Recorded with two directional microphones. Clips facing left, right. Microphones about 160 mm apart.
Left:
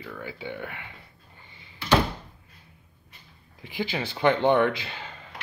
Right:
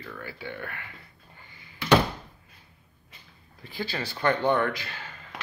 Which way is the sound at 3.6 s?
15° left (ahead or behind).